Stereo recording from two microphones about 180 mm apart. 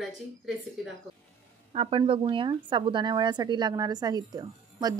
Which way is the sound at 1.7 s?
30° right (ahead or behind).